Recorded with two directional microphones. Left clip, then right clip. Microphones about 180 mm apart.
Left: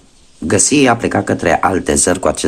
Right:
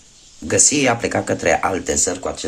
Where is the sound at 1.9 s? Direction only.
40° left (ahead or behind).